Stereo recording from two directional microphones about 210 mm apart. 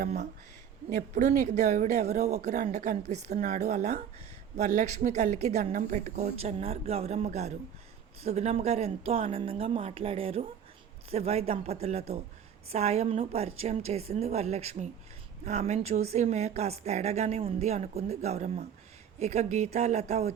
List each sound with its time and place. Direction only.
0.9 s a woman's voice: 40° right (ahead or behind)